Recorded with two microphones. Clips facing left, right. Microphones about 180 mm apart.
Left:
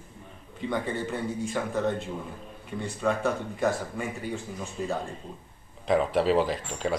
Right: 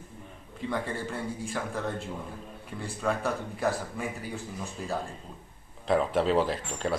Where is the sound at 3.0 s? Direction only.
Centre (ahead or behind).